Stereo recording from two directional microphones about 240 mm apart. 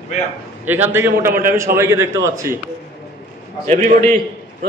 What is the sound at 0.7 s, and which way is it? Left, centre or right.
A man's voice, centre.